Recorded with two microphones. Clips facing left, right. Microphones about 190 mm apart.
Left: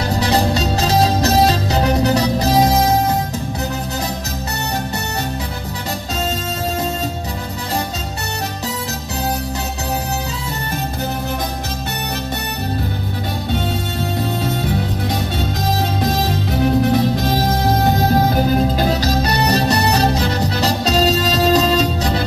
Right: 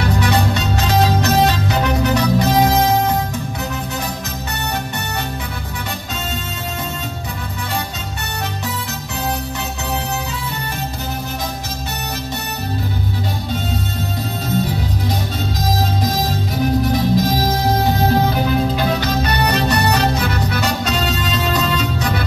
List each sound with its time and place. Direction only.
0.0 s music: 35° left (ahead or behind)
16.8 s music: 65° left (ahead or behind)
17.8 s music: 40° left (ahead or behind)